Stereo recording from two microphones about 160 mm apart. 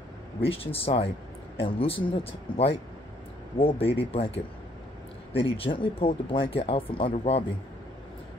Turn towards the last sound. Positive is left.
turn(degrees=35)  # may be behind; listen again after turning